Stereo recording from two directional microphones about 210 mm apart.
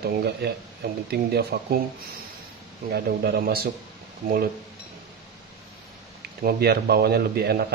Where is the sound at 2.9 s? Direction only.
45° right (ahead or behind).